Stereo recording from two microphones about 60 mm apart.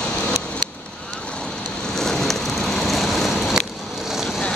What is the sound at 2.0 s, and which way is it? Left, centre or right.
Vehicle, centre.